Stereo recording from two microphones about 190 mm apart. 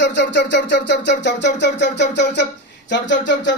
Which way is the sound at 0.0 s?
65° left (ahead or behind).